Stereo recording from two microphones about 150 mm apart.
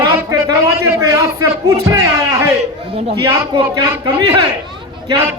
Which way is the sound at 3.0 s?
40° right (ahead or behind).